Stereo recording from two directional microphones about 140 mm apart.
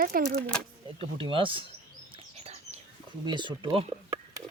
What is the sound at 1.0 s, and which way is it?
Speech, 40° right (ahead or behind).